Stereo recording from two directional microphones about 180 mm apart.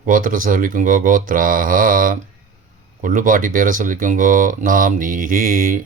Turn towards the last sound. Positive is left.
turn(degrees=-50)  # may be behind; listen again after turning